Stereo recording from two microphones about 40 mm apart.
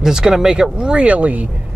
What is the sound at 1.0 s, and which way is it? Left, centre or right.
Speech, right.